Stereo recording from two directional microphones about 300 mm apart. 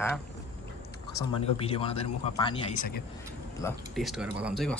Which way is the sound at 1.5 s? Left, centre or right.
Centre.